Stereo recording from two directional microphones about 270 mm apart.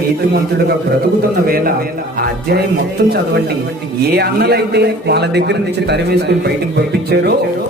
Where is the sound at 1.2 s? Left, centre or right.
Right.